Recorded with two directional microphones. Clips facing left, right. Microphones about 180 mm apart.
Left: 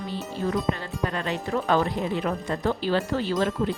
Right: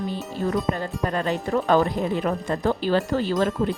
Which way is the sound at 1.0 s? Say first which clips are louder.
Right 3 dB; 40° right (ahead or behind).